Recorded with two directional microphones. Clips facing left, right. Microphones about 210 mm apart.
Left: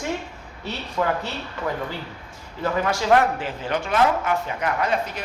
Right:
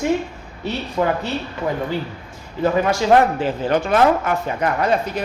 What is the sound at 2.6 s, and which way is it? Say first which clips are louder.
A woman's voice: right 5 dB; 20° right (ahead or behind).